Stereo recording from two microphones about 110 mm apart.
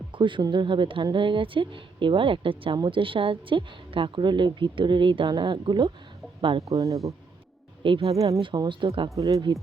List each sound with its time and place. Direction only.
0.1 s a woman's voice: 50° right (ahead or behind)
6.7 s speech: 30° right (ahead or behind)
7.8 s speech: 50° right (ahead or behind)
8.1 s speech: 30° right (ahead or behind)
8.4 s a woman's voice: 45° right (ahead or behind)
9.0 s speech: 30° right (ahead or behind)